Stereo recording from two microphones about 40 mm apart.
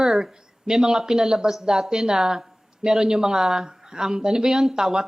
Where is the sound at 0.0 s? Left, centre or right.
Centre.